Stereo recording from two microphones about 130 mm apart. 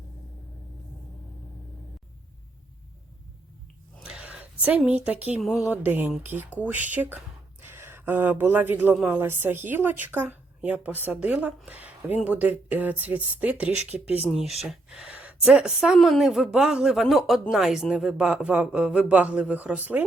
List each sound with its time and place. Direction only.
4.0 s a sound: 10° right (ahead or behind)
5.0 s speech: 10° right (ahead or behind)
5.7 s speech: 15° right (ahead or behind)
14.3 s speech: centre (ahead or behind)